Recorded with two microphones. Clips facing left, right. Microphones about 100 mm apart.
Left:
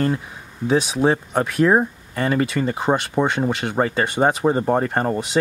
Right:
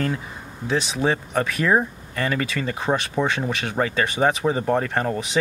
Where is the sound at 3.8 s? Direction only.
5° left (ahead or behind).